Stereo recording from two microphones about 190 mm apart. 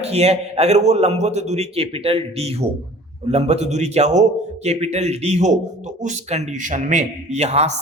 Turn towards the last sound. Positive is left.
turn(degrees=-35)  # may be behind; listen again after turning